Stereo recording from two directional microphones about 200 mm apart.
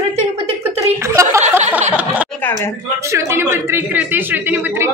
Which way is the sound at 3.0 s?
15° right (ahead or behind).